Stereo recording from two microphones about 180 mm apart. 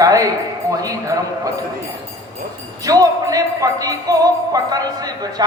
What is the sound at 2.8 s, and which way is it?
A man's voice, 20° right (ahead or behind).